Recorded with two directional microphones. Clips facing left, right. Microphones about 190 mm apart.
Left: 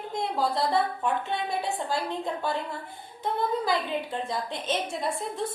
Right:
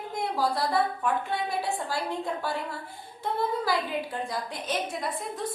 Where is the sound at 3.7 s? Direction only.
25° left (ahead or behind).